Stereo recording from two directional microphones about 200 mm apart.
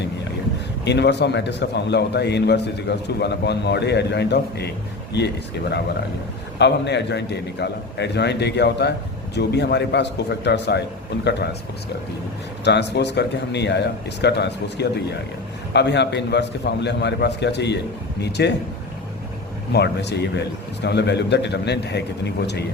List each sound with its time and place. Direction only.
0.9 s a man's voice: 60° left (ahead or behind)
6.6 s a man's voice: 60° left (ahead or behind)
12.6 s a man's voice: 60° left (ahead or behind)
19.7 s a man's voice: 60° left (ahead or behind)